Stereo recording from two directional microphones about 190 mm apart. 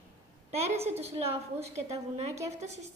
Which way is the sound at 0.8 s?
35° right (ahead or behind).